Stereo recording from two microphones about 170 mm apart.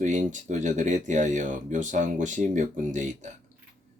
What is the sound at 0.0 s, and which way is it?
Speech, 45° right (ahead or behind).